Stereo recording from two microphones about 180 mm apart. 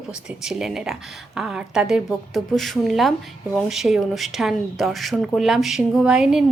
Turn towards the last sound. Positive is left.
turn(degrees=-5)  # may be behind; listen again after turning